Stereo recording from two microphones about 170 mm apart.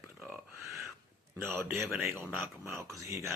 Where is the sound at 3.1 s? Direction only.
15° right (ahead or behind).